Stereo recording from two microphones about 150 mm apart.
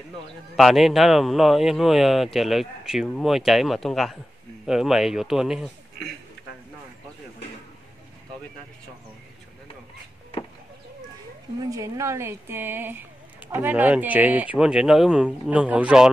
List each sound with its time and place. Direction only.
0.6 s speech: centre (ahead or behind)
11.7 s speech: 20° right (ahead or behind)